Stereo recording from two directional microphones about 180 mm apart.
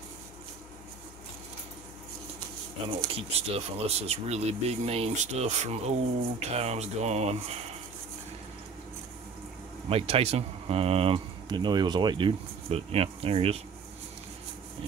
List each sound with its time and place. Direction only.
3.0 s speech: 30° right (ahead or behind)
9.8 s speech: 35° right (ahead or behind)